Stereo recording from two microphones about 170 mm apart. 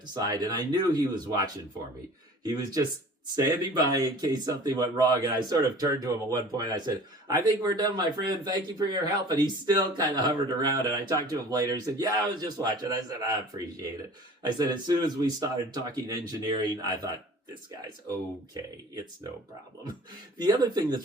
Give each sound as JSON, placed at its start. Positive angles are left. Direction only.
{"t": 0.0, "sound": "speech", "side_deg": -25}
{"t": 14.4, "sound": "speech", "side_deg": -25}
{"t": 20.4, "sound": "speech", "side_deg": -25}